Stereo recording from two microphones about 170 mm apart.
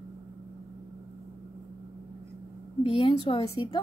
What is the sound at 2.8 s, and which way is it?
Speech, 30° left (ahead or behind).